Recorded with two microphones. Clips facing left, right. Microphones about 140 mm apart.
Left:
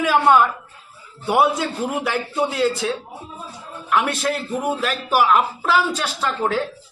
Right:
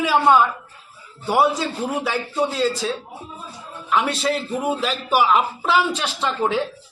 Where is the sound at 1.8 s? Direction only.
5° left (ahead or behind).